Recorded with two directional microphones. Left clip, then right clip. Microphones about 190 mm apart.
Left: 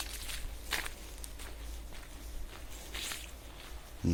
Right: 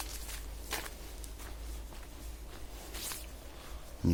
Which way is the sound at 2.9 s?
30° left (ahead or behind).